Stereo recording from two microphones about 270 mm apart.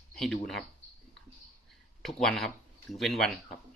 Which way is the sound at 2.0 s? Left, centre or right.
Centre.